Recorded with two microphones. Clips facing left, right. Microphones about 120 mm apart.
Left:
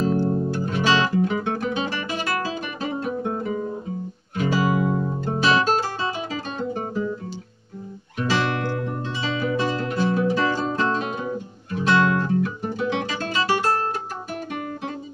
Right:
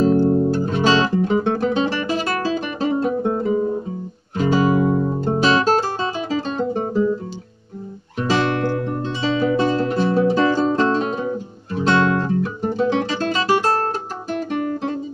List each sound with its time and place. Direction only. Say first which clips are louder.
0.0 s music: right 7 dB; 30° right (ahead or behind)
4.4 s guitar: right 5 dB; 30° right (ahead or behind)
8.2 s music: right 4 dB; 30° right (ahead or behind)
11.7 s guitar: right 2 dB; 30° right (ahead or behind)